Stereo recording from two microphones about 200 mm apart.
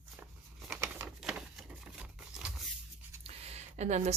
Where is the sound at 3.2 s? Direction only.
30° right (ahead or behind).